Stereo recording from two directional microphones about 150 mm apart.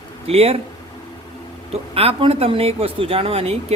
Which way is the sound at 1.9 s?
40° right (ahead or behind).